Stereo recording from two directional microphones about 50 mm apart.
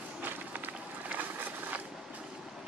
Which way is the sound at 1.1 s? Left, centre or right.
Right.